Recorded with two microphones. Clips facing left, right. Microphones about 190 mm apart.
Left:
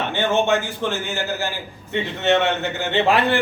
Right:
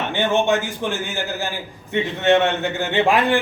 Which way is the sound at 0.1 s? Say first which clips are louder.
Right 1 dB; 15° right (ahead or behind).